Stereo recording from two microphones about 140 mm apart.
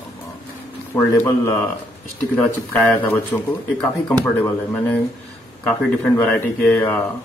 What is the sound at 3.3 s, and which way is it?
Speech, 20° left (ahead or behind).